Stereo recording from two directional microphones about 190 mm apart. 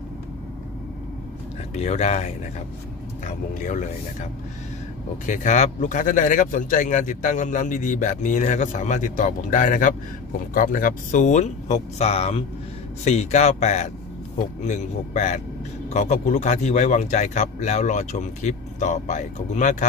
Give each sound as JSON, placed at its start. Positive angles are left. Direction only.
{"t": 1.8, "sound": "a man's voice", "side_deg": 35}